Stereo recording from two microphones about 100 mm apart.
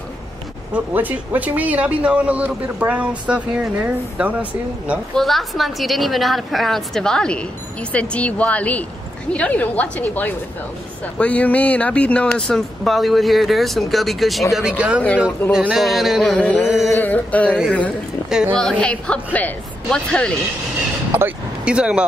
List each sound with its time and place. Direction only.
0.7 s speech: 15° right (ahead or behind)
5.1 s speech: centre (ahead or behind)
16.3 s speech: 10° left (ahead or behind)
16.6 s speech: 5° right (ahead or behind)
16.9 s speech: 15° left (ahead or behind)
21.6 s speech: 10° right (ahead or behind)